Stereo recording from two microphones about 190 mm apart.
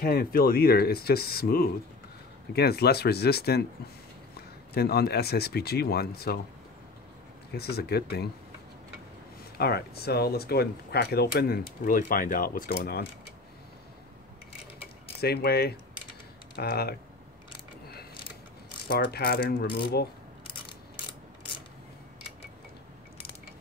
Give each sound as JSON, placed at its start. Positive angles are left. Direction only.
{"t": 0.0, "sound": "speech", "side_deg": 50}
{"t": 4.7, "sound": "speech", "side_deg": 55}
{"t": 7.5, "sound": "speech", "side_deg": 55}
{"t": 9.6, "sound": "speech", "side_deg": 55}
{"t": 15.1, "sound": "speech", "side_deg": 55}
{"t": 18.9, "sound": "speech", "side_deg": 55}